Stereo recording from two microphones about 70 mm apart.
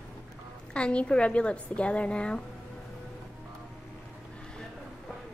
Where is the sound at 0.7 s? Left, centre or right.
Centre.